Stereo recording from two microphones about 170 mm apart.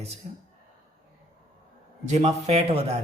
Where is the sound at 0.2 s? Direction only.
40° right (ahead or behind).